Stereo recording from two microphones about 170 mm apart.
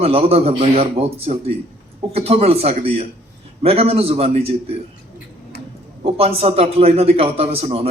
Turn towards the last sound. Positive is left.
turn(degrees=-35)  # may be behind; listen again after turning